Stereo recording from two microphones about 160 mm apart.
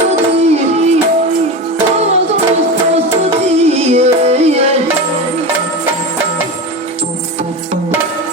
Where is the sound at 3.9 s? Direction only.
40° right (ahead or behind).